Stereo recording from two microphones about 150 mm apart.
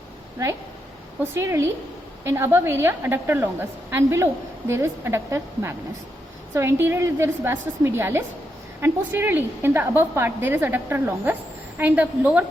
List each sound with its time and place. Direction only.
1.2 s a woman's voice: 15° right (ahead or behind)